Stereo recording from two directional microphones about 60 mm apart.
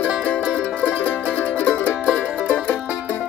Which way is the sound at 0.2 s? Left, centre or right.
Centre.